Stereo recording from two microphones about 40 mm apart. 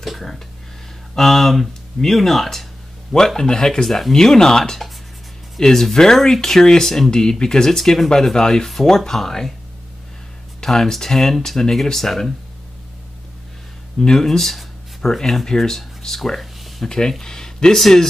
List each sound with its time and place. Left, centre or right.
0.0 s speech: centre
3.3 s speech: centre
10.6 s speech: centre
13.9 s speech: centre
14.2 s speech: centre
16.8 s speech: centre